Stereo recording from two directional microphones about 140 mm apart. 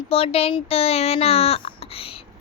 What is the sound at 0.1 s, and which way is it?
A child's voice, 45° left (ahead or behind).